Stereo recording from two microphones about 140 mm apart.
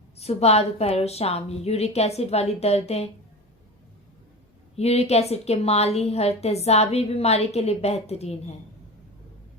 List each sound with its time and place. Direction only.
0.2 s a woman's voice: 50° left (ahead or behind)
4.8 s a woman's voice: 50° left (ahead or behind)